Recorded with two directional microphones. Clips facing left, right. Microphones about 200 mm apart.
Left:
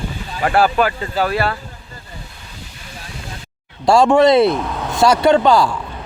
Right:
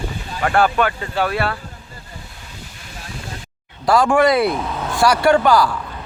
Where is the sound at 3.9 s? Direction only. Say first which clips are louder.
Left 3 dB; 25° left (ahead or behind).